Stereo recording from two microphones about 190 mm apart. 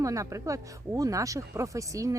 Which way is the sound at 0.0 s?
15° right (ahead or behind).